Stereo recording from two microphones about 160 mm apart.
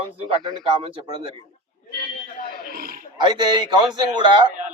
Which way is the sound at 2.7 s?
65° right (ahead or behind).